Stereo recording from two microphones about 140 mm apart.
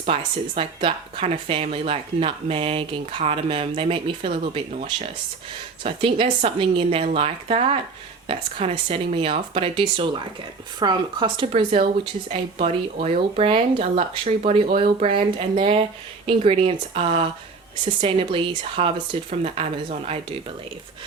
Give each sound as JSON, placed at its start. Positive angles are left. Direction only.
{"t": 0.0, "sound": "speech", "side_deg": -45}
{"t": 19.3, "sound": "speech", "side_deg": -50}